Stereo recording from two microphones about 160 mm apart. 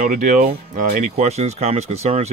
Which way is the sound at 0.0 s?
55° right (ahead or behind).